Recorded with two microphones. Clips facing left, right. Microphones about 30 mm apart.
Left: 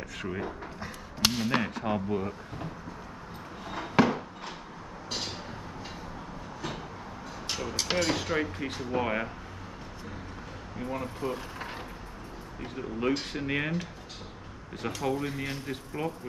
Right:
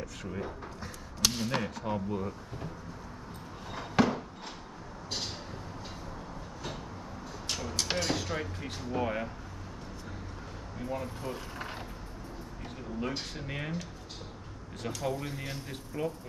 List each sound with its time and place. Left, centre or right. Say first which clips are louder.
0.0 s speech: left 3 dB; left
4.0 s a sound: left 3 dB; centre
7.7 s speech: left 3 dB; centre
8.0 s speech: left 5 dB; left
10.8 s speech: left 3 dB; left
11.5 s mechanisms: left 1 dB; centre
13.2 s speech: left 7 dB; left